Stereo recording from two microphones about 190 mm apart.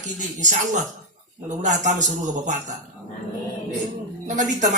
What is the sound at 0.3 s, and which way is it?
Music, 40° right (ahead or behind).